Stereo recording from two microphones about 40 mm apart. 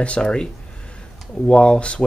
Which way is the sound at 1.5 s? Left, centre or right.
Left.